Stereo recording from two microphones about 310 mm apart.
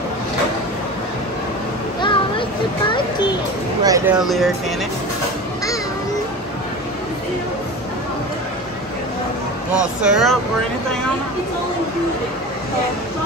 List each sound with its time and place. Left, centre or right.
2.0 s a sound: centre
2.9 s music: centre
3.8 s speech: centre
4.2 s speech: centre
9.8 s speech: centre